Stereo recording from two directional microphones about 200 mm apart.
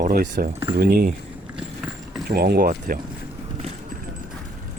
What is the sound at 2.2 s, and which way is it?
Speech, 50° right (ahead or behind).